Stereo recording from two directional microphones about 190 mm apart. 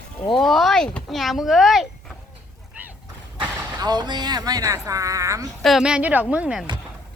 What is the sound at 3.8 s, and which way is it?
Speech, 20° right (ahead or behind).